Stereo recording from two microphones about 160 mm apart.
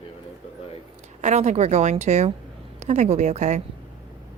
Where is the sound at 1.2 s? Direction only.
45° right (ahead or behind).